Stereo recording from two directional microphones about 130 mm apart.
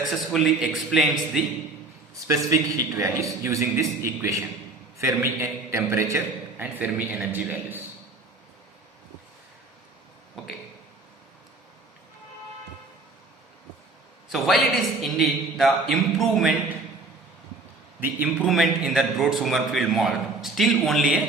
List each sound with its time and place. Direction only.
0.0 s a man's voice: centre (ahead or behind)
2.2 s a man's voice: 25° right (ahead or behind)
10.4 s a sound: centre (ahead or behind)
14.3 s a man's voice: centre (ahead or behind)
18.4 s a man's voice: centre (ahead or behind)